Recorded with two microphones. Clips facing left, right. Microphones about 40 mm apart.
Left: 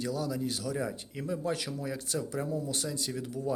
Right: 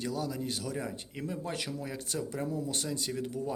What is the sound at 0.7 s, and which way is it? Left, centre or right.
Speech, centre.